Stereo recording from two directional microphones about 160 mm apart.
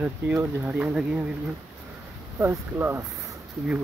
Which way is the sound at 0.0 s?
15° right (ahead or behind).